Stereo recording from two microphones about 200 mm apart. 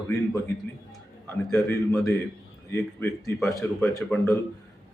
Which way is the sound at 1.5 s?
10° left (ahead or behind).